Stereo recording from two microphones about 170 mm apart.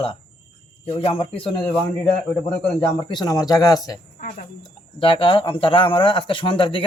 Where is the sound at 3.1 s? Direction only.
25° left (ahead or behind).